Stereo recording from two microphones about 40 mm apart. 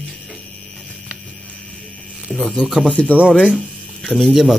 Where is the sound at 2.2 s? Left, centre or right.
Centre.